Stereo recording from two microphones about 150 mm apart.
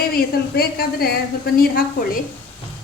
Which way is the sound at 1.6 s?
80° left.